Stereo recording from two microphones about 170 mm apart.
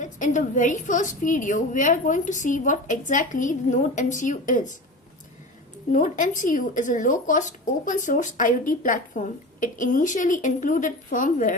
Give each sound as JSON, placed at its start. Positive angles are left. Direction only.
{"t": 0.0, "sound": "speech", "side_deg": 50}
{"t": 5.9, "sound": "speech", "side_deg": 50}